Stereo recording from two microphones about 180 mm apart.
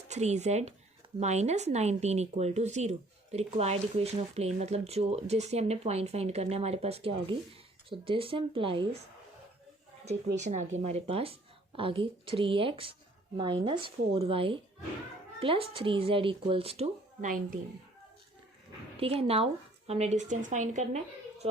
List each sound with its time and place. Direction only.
0.1 s a woman's voice: 40° right (ahead or behind)
10.3 s a woman's voice: 40° right (ahead or behind)
18.9 s speech: 30° right (ahead or behind)